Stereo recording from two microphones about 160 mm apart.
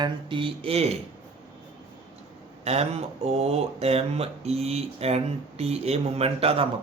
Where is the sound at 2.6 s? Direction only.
40° right (ahead or behind).